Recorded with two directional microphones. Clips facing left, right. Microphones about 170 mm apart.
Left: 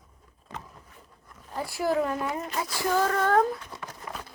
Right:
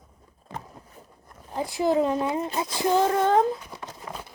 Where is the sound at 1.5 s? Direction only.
20° right (ahead or behind).